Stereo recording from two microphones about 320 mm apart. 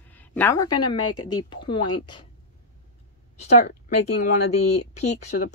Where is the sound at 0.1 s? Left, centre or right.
Centre.